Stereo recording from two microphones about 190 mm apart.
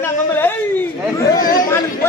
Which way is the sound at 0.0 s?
10° left (ahead or behind).